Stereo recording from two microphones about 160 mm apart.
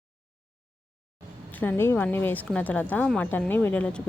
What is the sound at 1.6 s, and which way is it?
A woman's voice, 15° left (ahead or behind).